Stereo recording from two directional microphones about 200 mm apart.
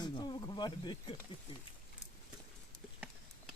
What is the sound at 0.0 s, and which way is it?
Insect, 20° left (ahead or behind).